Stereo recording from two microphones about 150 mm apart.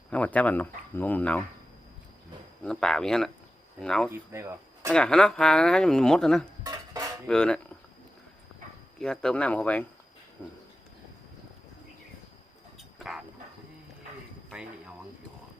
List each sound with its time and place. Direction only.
0.1 s speech: 10° left (ahead or behind)
2.6 s speech: 5° left (ahead or behind)
4.1 s speech: 15° right (ahead or behind)
4.9 s speech: 5° left (ahead or behind)
6.7 s dishes: 20° right (ahead or behind)
7.3 s speech: 5° left (ahead or behind)
9.0 s speech: 5° left (ahead or behind)
13.0 s a sound: centre (ahead or behind)
14.5 s a sound: 5° right (ahead or behind)